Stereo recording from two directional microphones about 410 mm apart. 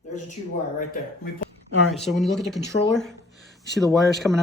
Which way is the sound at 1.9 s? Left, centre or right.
Centre.